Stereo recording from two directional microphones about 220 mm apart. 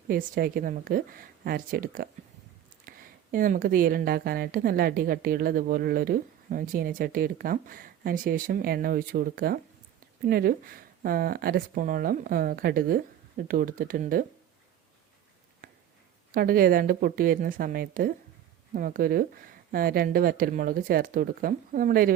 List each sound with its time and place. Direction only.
0.1 s a woman's voice: 40° right (ahead or behind)
15.6 s a sound: 40° right (ahead or behind)
16.3 s a woman's voice: 40° right (ahead or behind)